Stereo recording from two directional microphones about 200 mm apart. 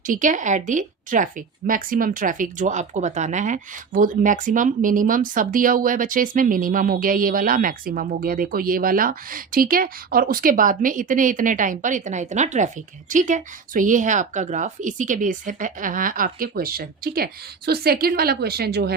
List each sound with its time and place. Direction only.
0.0 s a woman's voice: 40° right (ahead or behind)